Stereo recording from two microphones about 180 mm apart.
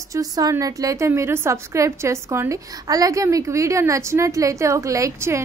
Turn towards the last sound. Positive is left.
turn(degrees=-15)  # may be behind; listen again after turning